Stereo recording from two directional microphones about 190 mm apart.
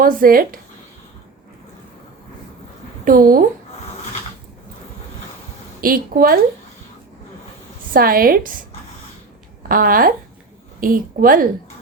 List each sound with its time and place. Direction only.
0.0 s a woman's voice: 50° right (ahead or behind)
3.0 s speech: 50° right (ahead or behind)
5.8 s a woman's voice: 50° right (ahead or behind)
7.9 s a woman's voice: 50° right (ahead or behind)
9.6 s a woman's voice: 50° right (ahead or behind)